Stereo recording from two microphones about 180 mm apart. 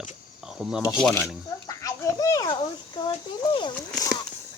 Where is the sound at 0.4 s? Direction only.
5° right (ahead or behind).